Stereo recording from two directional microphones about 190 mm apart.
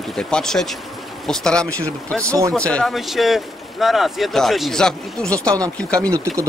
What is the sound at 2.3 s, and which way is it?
Speech, 15° right (ahead or behind).